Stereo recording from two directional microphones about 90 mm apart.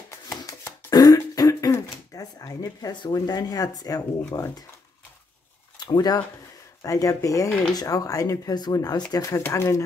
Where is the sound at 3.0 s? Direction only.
55° left (ahead or behind).